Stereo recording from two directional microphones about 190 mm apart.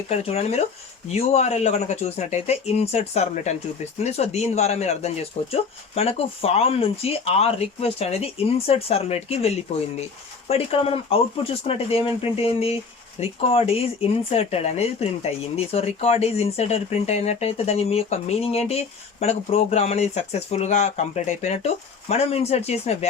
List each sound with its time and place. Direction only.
0.1 s speech: 35° left (ahead or behind)
10.5 s speech: 30° left (ahead or behind)